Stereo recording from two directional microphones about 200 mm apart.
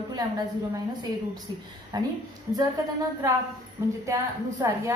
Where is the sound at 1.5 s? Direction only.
20° right (ahead or behind).